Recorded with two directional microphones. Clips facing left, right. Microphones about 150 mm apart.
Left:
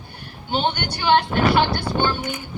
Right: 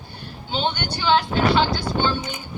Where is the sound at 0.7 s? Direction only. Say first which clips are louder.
Even; 60° left (ahead or behind).